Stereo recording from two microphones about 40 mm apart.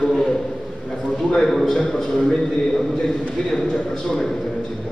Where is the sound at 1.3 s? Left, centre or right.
Centre.